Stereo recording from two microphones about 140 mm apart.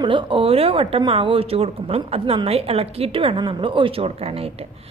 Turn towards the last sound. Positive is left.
turn(degrees=-45)  # may be behind; listen again after turning